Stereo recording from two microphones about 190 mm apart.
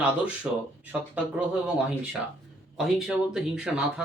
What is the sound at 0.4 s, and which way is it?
Speech, 5° right (ahead or behind).